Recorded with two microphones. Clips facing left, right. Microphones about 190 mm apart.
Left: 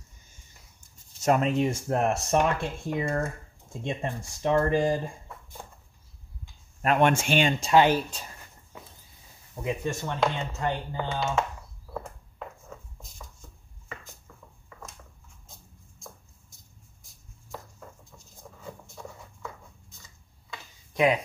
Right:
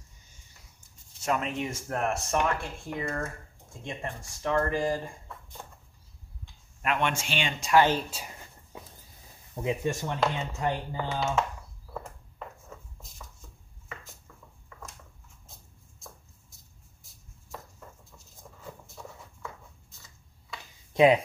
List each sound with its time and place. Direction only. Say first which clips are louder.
0.7 s speech: left 1 dB; 40° left (ahead or behind); by 5.1 s 25° left (ahead or behind)
6.8 s speech: left 6 dB; 40° left (ahead or behind)
7.6 s speech: left 1 dB; 20° left (ahead or behind)
8.1 s speech: right 1 dB; 10° right (ahead or behind)
9.6 s speech: right 1 dB; 20° right (ahead or behind)
10.2 s speech: left 1 dB; 5° right (ahead or behind)
11.9 s a sound: left 3 dB; centre (ahead or behind)
17.5 s patter: left 2 dB; centre (ahead or behind)
19.4 s a sound: left 2 dB; centre (ahead or behind)
20.9 s speech: right 3 dB; 25° right (ahead or behind)